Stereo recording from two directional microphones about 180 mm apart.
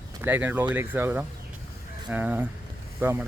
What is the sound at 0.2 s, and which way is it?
Speech, 10° right (ahead or behind).